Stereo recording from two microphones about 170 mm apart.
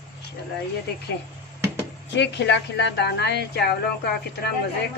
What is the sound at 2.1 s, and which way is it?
A woman's voice, 90° left.